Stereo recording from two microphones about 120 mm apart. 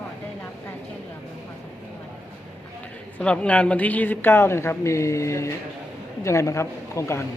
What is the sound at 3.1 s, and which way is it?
A woman's voice, 10° left (ahead or behind).